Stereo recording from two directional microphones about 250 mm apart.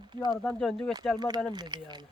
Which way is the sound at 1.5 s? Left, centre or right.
Centre.